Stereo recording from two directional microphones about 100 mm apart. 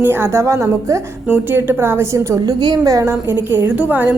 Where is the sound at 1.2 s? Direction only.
10° right (ahead or behind).